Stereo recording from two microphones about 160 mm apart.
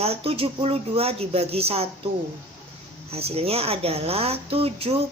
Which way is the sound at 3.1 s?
40° right (ahead or behind).